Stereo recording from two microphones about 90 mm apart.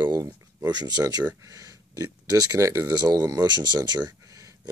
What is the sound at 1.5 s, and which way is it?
Speech, 40° right (ahead or behind).